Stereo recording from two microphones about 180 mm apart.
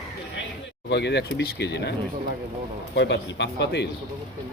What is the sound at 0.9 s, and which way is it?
Speech, 65° left (ahead or behind).